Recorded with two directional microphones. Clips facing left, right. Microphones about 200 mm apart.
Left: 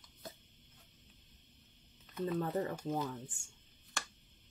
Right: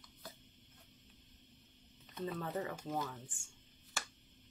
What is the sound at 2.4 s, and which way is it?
Speech, 40° left (ahead or behind).